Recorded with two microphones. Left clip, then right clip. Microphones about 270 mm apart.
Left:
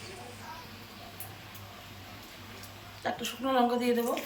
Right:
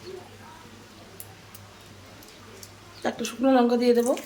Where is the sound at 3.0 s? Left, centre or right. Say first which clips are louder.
Right 7 dB; right.